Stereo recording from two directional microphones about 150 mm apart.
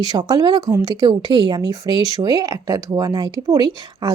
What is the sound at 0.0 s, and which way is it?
Speech, 25° right (ahead or behind).